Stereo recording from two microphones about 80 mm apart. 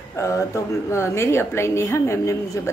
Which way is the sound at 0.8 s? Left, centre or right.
Left.